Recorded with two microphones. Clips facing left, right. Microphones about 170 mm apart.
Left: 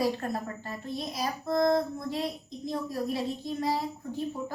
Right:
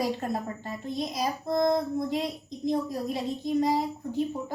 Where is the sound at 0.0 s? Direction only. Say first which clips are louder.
Even; 20° right (ahead or behind).